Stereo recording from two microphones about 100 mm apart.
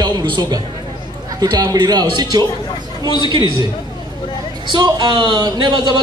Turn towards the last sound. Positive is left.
turn(degrees=-45)  # may be behind; listen again after turning